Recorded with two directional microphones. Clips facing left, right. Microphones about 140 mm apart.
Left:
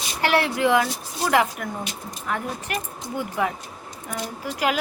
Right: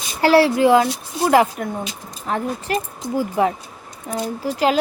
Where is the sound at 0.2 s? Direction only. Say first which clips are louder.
Right 7 dB; 30° right (ahead or behind).